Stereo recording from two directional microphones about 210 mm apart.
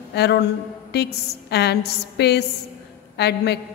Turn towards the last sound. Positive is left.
turn(degrees=50)  # may be behind; listen again after turning